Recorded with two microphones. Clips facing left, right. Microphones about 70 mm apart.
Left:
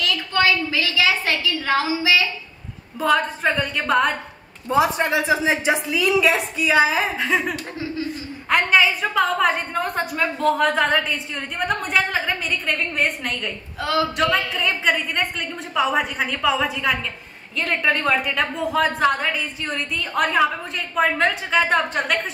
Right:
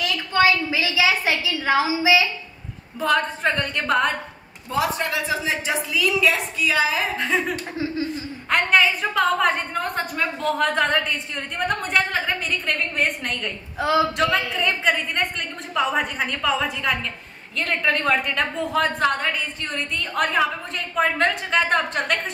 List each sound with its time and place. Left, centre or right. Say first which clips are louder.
0.0 s a sound: right 1 dB; centre
3.0 s a woman's voice: left 2 dB; centre
4.6 s a woman's voice: left 5 dB; left
7.2 s a woman's voice: left 1 dB; centre